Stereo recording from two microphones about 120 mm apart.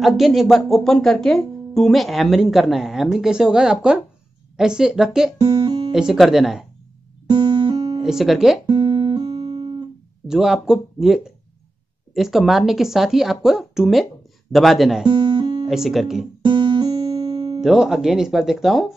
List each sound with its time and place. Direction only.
0.0 s speech: centre (ahead or behind)
5.4 s speech: 35° right (ahead or behind)
5.9 s speech: 5° right (ahead or behind)
7.2 s music: 40° right (ahead or behind)
8.0 s speech: 5° right (ahead or behind)
8.6 s guitar: 35° right (ahead or behind)
10.2 s speech: 5° right (ahead or behind)
15.0 s music: 40° right (ahead or behind)
15.7 s speech: centre (ahead or behind)
16.4 s guitar: 40° right (ahead or behind)
17.0 s music: 55° right (ahead or behind)
17.6 s speech: 5° right (ahead or behind)